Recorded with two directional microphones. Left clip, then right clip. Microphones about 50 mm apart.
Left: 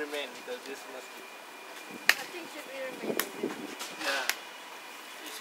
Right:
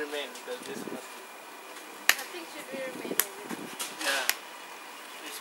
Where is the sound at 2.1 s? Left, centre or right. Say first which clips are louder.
Even; right.